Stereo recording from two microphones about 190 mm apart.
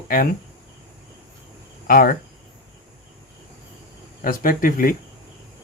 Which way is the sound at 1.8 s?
50° left (ahead or behind).